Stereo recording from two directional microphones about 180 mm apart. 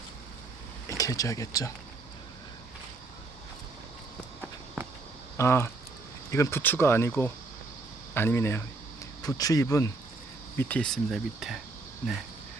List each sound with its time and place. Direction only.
0.9 s speech: 20° left (ahead or behind)
5.4 s speech: 15° left (ahead or behind)
10.6 s speech: 5° left (ahead or behind)